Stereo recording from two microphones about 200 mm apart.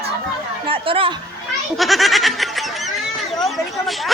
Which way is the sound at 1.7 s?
Centre (ahead or behind).